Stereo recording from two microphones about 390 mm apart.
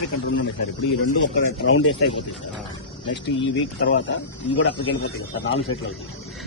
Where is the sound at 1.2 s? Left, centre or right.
Left.